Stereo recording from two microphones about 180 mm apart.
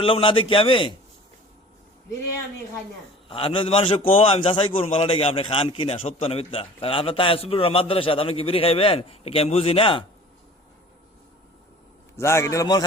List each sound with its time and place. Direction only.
0.0 s a man's voice: 30° left (ahead or behind)
3.2 s a man's voice: 30° left (ahead or behind)
12.1 s a man's voice: 15° left (ahead or behind)